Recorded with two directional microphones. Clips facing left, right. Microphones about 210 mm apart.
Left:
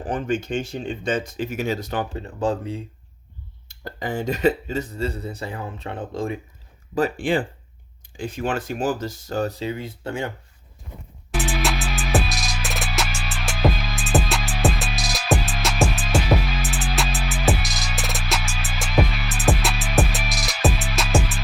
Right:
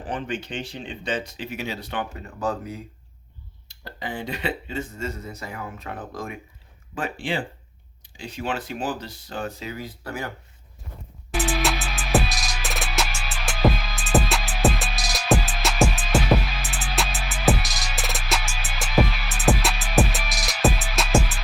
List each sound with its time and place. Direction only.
0.1 s speech: 45° left (ahead or behind); by 2.8 s 30° left (ahead or behind)
3.7 s speech: 45° left (ahead or behind); by 6.4 s 30° left (ahead or behind)
6.9 s speech: 45° left (ahead or behind); by 10.3 s 25° left (ahead or behind)
11.4 s music: centre (ahead or behind)